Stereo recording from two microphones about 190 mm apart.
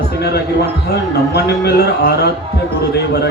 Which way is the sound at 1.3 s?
60° left (ahead or behind).